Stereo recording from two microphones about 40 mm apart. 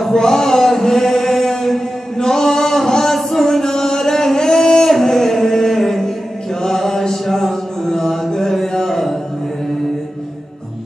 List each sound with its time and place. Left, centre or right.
0.1 s chant: centre